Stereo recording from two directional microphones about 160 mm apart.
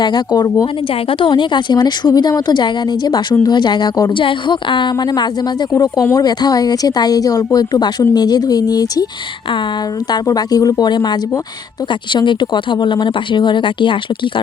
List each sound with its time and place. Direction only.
0.0 s speech: 25° left (ahead or behind)
10.1 s speech: 25° left (ahead or behind)